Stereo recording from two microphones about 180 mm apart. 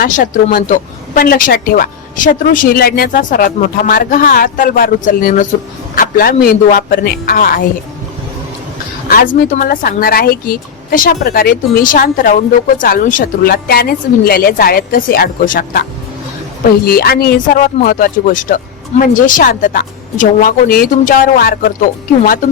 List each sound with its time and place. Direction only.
0.5 s speech: 50° left (ahead or behind)
9.0 s speech: 50° left (ahead or behind)